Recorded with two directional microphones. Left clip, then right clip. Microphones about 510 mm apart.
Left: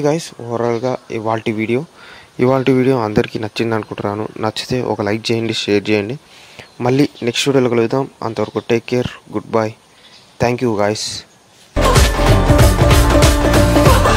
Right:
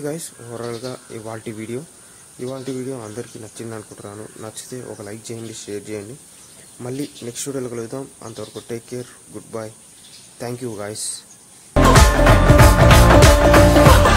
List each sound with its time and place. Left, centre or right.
0.0 s speech: right
11.8 s music: centre